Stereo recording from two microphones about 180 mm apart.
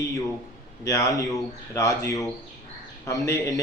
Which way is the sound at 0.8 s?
20° left (ahead or behind).